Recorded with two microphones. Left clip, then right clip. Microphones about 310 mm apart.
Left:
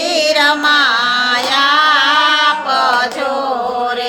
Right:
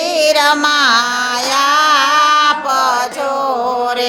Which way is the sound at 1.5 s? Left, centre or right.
Right.